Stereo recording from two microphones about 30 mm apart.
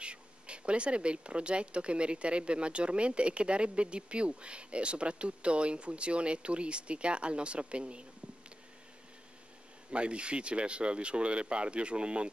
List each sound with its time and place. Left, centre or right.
0.0 s speech: right
9.8 s speech: right